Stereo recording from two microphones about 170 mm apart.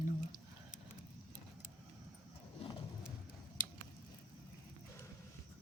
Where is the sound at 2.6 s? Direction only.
35° left (ahead or behind).